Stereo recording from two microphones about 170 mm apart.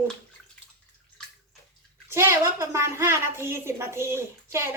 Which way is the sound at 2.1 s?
15° right (ahead or behind).